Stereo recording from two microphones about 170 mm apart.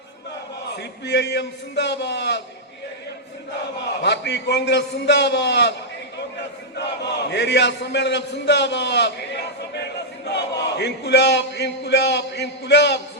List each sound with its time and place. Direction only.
0.8 s a man's voice: 90° left
4.0 s a man's voice: 90° left
6.7 s a man's voice: 85° left